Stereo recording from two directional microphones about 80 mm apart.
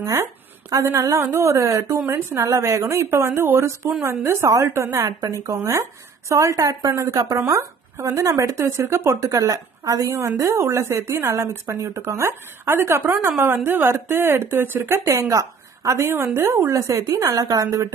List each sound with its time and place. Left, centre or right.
0.0 s speech: right